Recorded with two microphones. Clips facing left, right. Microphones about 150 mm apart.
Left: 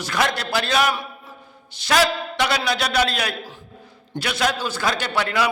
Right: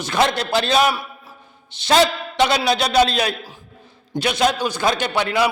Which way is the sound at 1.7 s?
25° right (ahead or behind).